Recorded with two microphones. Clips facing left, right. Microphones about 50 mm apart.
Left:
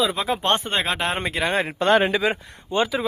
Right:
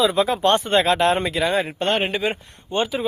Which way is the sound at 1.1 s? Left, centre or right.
Left.